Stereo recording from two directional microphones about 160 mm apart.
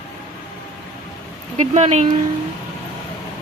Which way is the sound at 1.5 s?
45° right (ahead or behind).